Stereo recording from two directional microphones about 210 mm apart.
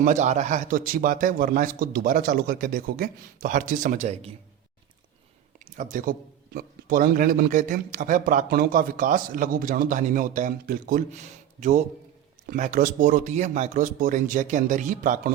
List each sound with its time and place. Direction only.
0.0 s a man's voice: 35° right (ahead or behind)
5.7 s a man's voice: 40° right (ahead or behind)